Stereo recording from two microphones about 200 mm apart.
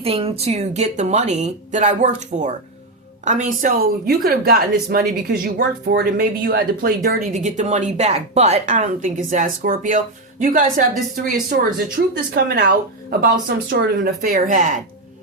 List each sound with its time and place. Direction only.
0.0 s a woman's voice: 30° right (ahead or behind)